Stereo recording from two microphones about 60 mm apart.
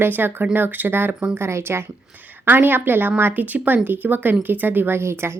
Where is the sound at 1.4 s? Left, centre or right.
Right.